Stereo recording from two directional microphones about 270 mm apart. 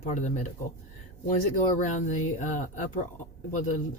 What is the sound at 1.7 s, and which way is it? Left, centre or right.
Speech, left.